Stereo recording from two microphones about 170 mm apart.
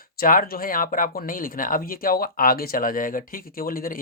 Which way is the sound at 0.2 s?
60° left (ahead or behind).